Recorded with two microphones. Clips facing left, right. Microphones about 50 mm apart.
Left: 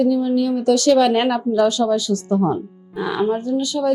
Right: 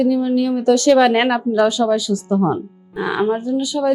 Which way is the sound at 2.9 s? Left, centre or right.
Right.